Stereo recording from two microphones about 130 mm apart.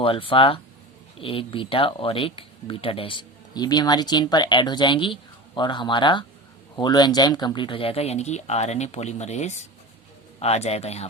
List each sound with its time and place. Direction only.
0.0 s speech: 45° left (ahead or behind)